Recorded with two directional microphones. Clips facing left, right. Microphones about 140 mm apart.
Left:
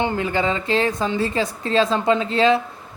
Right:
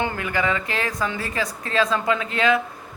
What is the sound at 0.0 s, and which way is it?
Speech, 25° left (ahead or behind).